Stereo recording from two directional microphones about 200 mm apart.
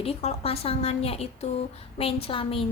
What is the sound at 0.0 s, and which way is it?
Speech, 30° left (ahead or behind).